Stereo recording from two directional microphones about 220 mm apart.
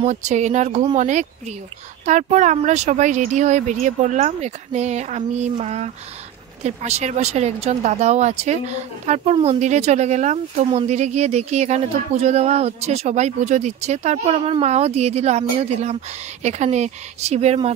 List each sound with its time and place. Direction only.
0.0 s speech: 30° right (ahead or behind)